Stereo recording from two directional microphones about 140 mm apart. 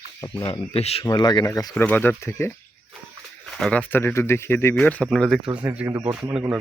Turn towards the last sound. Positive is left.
turn(degrees=-10)  # may be behind; listen again after turning